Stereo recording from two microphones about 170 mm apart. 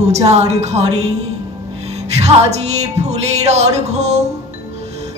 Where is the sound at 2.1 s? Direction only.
40° right (ahead or behind).